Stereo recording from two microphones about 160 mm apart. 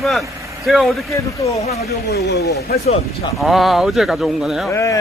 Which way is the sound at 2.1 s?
90° left.